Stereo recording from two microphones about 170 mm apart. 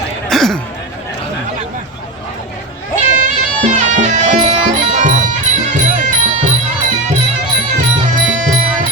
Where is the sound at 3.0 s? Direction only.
45° right (ahead or behind).